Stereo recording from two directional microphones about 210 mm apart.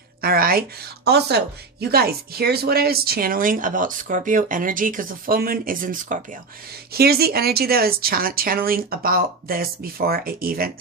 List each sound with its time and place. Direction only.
0.2 s speech: 45° right (ahead or behind)